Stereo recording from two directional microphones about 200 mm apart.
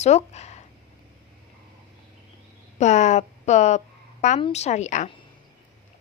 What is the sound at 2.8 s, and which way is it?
Speech, 35° left (ahead or behind).